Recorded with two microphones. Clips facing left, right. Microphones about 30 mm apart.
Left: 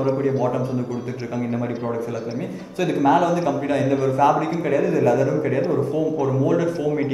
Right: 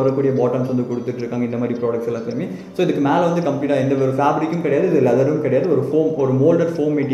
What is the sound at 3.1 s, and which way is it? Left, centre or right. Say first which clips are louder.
Speech: right 1 dB; right.